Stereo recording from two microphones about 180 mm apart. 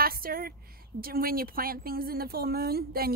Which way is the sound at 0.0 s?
55° right (ahead or behind).